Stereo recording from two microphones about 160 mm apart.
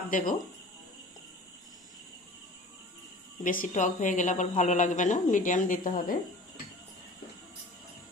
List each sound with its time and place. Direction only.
0.1 s speech: 55° left (ahead or behind)
3.4 s speech: 55° left (ahead or behind)